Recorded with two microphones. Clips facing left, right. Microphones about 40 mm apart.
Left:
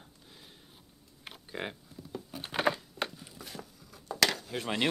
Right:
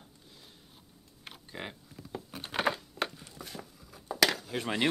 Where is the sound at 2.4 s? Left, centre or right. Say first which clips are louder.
Left 1 dB; centre.